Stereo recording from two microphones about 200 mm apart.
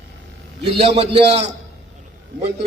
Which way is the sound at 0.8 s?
30° right (ahead or behind).